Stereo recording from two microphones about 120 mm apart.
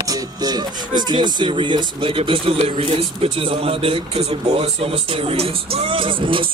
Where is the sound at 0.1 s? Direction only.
35° right (ahead or behind).